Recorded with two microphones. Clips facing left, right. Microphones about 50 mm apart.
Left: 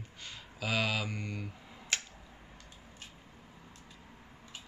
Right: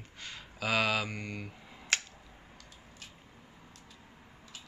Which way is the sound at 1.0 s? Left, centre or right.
Right.